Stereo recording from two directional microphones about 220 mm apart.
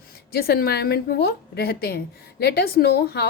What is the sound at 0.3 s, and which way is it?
A woman's voice, 45° left (ahead or behind).